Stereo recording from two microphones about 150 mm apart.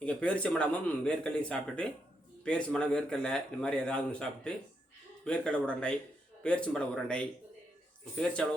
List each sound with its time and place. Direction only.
0.0 s speech: 10° left (ahead or behind)